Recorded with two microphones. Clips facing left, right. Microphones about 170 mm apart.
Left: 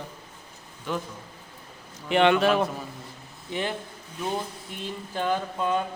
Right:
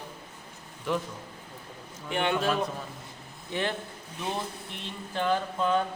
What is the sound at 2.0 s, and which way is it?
Speech, 85° left.